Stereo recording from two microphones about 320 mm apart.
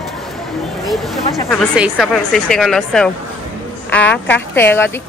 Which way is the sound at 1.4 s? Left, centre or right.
Centre.